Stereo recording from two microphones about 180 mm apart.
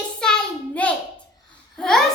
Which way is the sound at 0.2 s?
5° left (ahead or behind).